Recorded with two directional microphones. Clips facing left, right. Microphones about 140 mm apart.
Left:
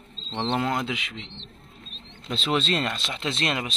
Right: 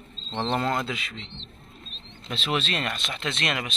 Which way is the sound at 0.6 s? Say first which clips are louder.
Even; 15° left (ahead or behind).